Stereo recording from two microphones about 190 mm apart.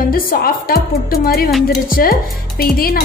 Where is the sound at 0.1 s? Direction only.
50° left (ahead or behind).